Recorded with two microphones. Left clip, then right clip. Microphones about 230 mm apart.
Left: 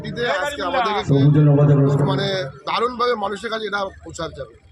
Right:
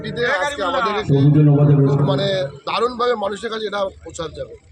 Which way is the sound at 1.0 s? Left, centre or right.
Centre.